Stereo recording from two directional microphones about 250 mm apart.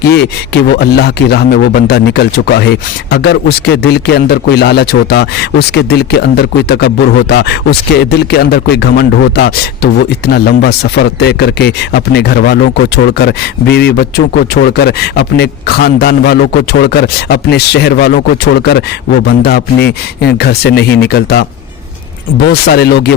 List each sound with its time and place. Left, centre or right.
0.8 s speech: left